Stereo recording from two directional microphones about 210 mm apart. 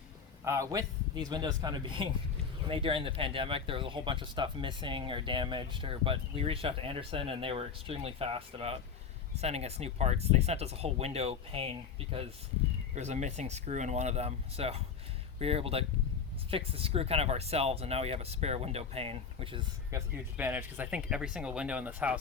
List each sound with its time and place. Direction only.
0.4 s speech: 15° right (ahead or behind)
19.9 s speech: 10° right (ahead or behind)